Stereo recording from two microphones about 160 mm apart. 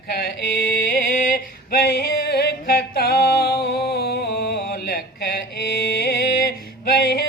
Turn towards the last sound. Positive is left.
turn(degrees=80)